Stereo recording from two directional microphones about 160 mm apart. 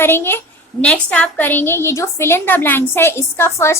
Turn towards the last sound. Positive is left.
turn(degrees=15)  # may be behind; listen again after turning